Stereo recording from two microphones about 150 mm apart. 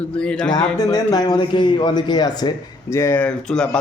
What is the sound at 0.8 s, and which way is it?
Speech, 25° left (ahead or behind).